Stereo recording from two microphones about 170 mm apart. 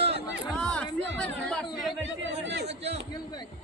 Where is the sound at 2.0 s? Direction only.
90° right.